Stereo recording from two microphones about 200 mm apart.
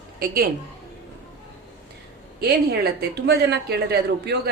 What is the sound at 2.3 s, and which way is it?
A woman's voice, 55° right (ahead or behind).